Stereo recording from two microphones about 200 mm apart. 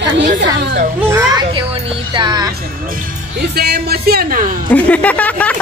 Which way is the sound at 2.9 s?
50° right (ahead or behind).